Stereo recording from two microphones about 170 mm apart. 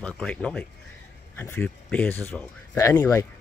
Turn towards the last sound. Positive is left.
turn(degrees=15)  # may be behind; listen again after turning